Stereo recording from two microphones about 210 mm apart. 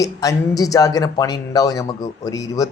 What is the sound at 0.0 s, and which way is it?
Speech, 15° left (ahead or behind).